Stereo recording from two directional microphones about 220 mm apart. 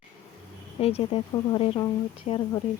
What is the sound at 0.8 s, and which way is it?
Speech, 25° left (ahead or behind).